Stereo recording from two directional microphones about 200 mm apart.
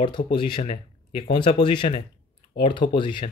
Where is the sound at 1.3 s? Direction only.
20° left (ahead or behind).